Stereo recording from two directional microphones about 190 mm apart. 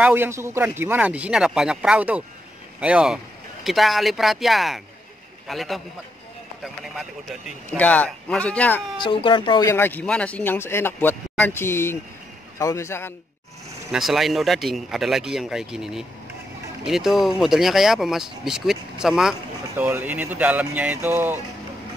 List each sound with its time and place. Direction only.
0.0 s speech: 10° right (ahead or behind); by 8.8 s 5° left (ahead or behind)
8.9 s speech: 25° left (ahead or behind)
13.9 s speech: centre (ahead or behind)